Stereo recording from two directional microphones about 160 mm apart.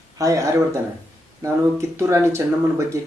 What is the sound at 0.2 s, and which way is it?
Speech, 20° right (ahead or behind).